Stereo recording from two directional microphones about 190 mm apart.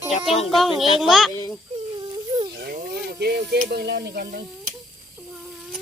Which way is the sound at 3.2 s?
60° right (ahead or behind).